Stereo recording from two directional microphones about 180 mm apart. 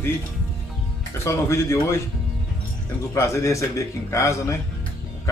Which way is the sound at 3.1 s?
15° left (ahead or behind).